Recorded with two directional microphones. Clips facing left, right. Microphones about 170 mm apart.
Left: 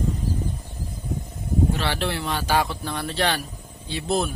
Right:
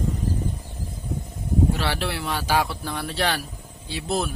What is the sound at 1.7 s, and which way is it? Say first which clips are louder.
Speech: left 1 dB; 5° right (ahead or behind).